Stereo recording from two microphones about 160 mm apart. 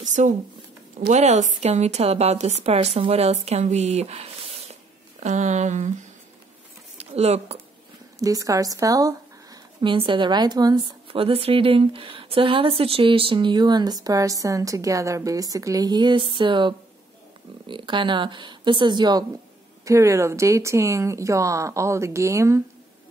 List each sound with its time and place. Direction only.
0.0 s a sound: 50° right (ahead or behind)
1.1 s a woman's voice: 45° right (ahead or behind)
8.2 s speech: 20° right (ahead or behind)